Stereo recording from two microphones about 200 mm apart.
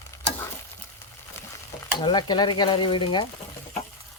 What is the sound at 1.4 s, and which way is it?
Stir, 15° left (ahead or behind).